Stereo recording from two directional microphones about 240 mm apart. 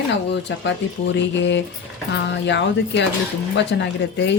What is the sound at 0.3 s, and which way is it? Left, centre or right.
Speech, left.